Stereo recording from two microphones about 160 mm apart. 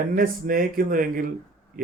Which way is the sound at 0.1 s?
60° right (ahead or behind).